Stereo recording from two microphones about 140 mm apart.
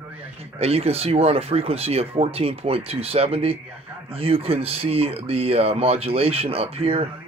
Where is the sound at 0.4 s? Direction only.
45° right (ahead or behind).